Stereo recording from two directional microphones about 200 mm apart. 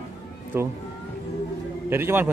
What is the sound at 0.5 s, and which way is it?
Speech, 10° right (ahead or behind).